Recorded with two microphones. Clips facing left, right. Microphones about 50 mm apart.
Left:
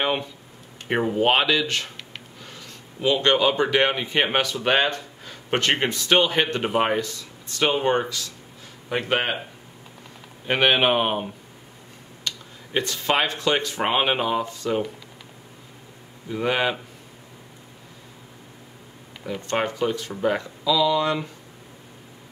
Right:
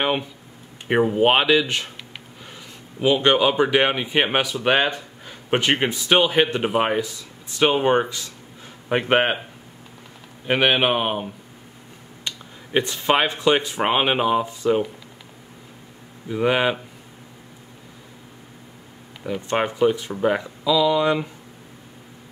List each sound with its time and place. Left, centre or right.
0.8 s speech: centre
3.0 s speech: centre
10.4 s speech: centre
12.3 s a sound: right
13.3 s speech: centre
16.3 s speech: centre
19.2 s speech: centre